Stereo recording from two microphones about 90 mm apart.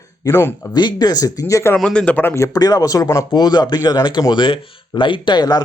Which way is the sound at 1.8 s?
10° left (ahead or behind).